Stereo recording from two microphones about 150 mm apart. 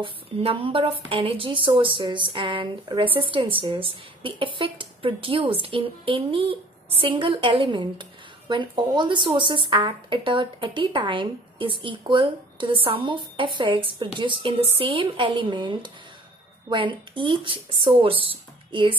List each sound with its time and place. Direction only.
0.0 s a woman's voice: 40° right (ahead or behind)